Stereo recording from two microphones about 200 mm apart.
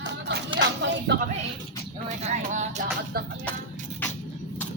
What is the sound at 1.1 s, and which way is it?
Speech, 60° right (ahead or behind).